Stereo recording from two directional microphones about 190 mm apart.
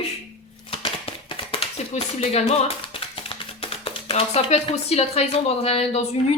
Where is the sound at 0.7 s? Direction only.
30° left (ahead or behind).